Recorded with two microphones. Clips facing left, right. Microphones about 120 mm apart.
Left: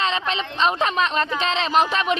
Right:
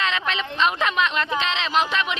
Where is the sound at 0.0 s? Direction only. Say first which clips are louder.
Left 2 dB; 35° left (ahead or behind).